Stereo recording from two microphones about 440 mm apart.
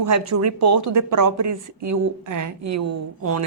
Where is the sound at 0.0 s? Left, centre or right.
Right.